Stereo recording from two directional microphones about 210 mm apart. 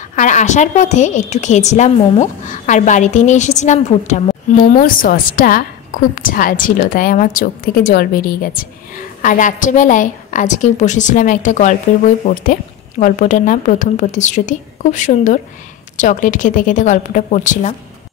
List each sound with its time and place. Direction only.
0.1 s a woman's voice: 35° left (ahead or behind)